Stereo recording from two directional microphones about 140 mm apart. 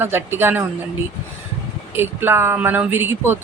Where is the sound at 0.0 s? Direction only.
15° right (ahead or behind).